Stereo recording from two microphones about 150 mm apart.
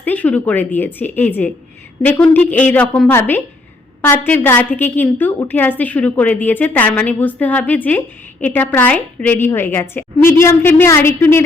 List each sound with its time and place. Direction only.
0.0 s a woman's voice: 10° left (ahead or behind)